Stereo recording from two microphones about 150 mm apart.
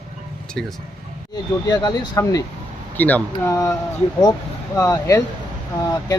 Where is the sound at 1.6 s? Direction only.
25° left (ahead or behind).